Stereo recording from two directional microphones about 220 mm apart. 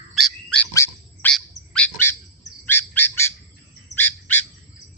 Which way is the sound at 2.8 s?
90° left.